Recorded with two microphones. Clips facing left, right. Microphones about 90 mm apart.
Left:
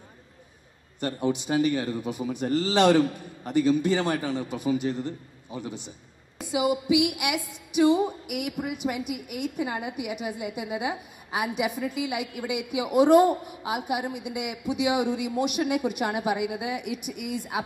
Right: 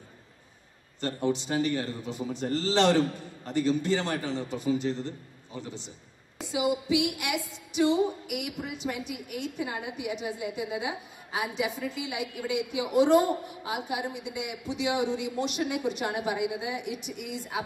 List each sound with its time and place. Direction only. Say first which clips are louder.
1.0 s a man's voice: left 2 dB; 15° left (ahead or behind)